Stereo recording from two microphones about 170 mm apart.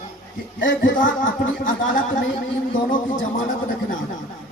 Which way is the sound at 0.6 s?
90° left.